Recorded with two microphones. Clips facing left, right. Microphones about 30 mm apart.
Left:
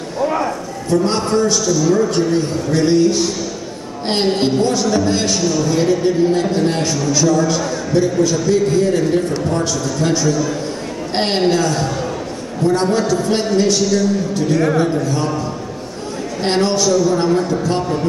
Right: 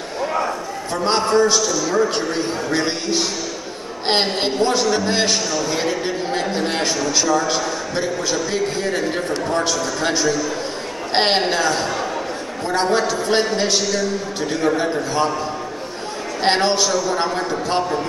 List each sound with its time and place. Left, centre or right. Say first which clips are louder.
0.8 s a man's voice: left 3 dB; right
4.4 s a man's voice: left 2 dB; centre
5.4 s a man's voice: left 5 dB; centre
11.1 s a man's voice: left 2 dB; right
16.4 s a man's voice: left 2 dB; right